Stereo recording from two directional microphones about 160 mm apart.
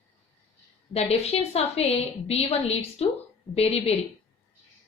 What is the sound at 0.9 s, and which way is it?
A woman's voice, 40° left (ahead or behind).